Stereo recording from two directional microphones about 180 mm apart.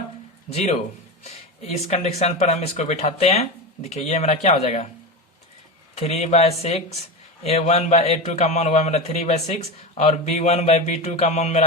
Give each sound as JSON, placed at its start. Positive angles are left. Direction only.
{"t": 0.5, "sound": "speech", "side_deg": 35}
{"t": 5.9, "sound": "speech", "side_deg": 35}